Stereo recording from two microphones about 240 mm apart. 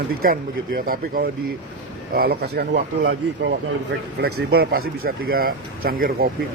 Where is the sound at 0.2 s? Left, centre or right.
Right.